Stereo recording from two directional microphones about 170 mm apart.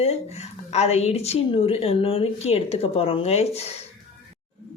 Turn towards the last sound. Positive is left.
turn(degrees=40)  # may be behind; listen again after turning